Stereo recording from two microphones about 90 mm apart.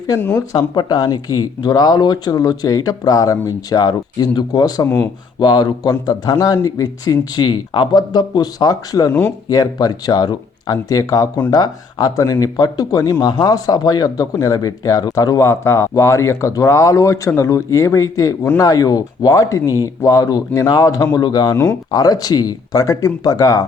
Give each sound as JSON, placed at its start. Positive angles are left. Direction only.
{"t": 0.2, "sound": "speech", "side_deg": 20}
{"t": 0.5, "sound": "speech", "side_deg": 50}
{"t": 4.8, "sound": "speech", "side_deg": 30}
{"t": 5.4, "sound": "speech", "side_deg": 55}
{"t": 13.2, "sound": "speech", "side_deg": 50}
{"t": 21.5, "sound": "speech", "side_deg": 30}
{"t": 21.9, "sound": "speech", "side_deg": 45}